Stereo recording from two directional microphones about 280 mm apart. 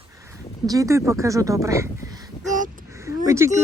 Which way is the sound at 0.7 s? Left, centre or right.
Centre.